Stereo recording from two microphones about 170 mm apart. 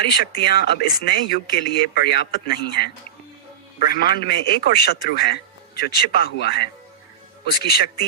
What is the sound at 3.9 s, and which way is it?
Speech, 65° left (ahead or behind).